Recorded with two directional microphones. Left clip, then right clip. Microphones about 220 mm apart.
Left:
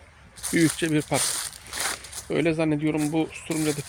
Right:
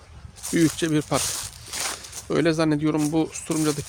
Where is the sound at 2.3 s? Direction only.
25° right (ahead or behind).